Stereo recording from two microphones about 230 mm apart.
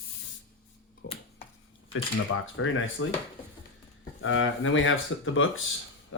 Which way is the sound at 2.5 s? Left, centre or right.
Left.